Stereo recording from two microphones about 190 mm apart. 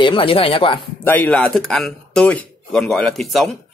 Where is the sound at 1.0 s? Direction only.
10° left (ahead or behind).